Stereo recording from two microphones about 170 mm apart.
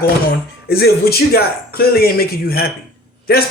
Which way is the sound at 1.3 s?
65° left (ahead or behind).